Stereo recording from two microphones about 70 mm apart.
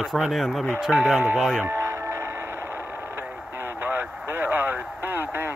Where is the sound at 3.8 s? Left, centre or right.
Right.